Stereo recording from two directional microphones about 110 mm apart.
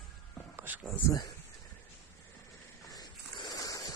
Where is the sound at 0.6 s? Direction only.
15° right (ahead or behind).